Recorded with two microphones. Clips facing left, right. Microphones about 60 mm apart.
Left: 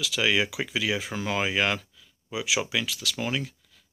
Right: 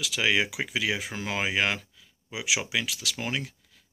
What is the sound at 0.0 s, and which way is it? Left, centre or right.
Speech, right.